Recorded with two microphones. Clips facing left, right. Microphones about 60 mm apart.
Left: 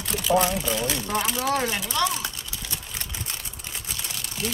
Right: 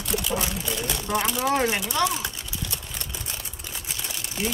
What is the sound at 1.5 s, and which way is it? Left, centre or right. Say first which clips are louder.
Speech: right 4 dB; right.